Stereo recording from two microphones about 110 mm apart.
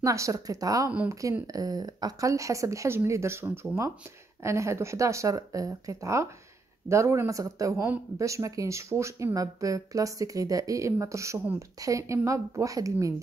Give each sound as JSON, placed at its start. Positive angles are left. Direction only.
{"t": 0.0, "sound": "speech", "side_deg": -30}